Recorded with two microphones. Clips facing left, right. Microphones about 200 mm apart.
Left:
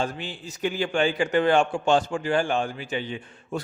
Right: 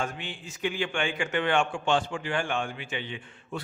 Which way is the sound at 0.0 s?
35° left (ahead or behind).